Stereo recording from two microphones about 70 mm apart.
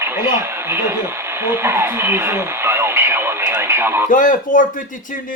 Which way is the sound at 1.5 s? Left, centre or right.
Right.